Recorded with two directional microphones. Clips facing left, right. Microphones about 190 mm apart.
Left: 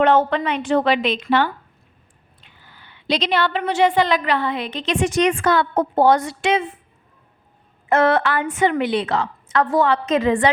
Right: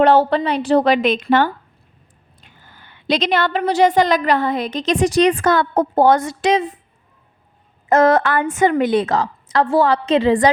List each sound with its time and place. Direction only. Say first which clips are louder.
0.0 s a woman's voice: right 3 dB; 35° right (ahead or behind)
2.4 s a sound: right 2 dB; 45° right (ahead or behind)
3.6 s a woman's voice: right 4 dB; 35° right (ahead or behind)
7.9 s a woman's voice: right 3 dB; 40° right (ahead or behind)